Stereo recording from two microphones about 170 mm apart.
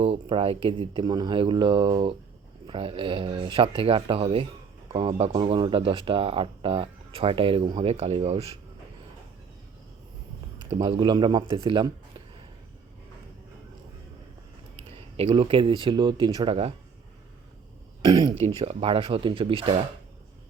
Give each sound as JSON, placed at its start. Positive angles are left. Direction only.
{"t": 0.0, "sound": "speech", "side_deg": -35}
{"t": 10.7, "sound": "speech", "side_deg": -35}
{"t": 14.8, "sound": "a sound", "side_deg": -35}
{"t": 15.8, "sound": "speech", "side_deg": -25}
{"t": 18.0, "sound": "speech", "side_deg": -20}
{"t": 18.3, "sound": "speech", "side_deg": -40}